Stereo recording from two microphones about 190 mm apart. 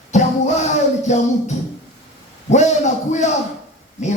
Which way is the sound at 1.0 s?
40° left (ahead or behind).